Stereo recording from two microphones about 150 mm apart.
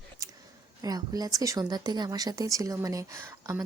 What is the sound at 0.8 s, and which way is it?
Speech, 25° right (ahead or behind).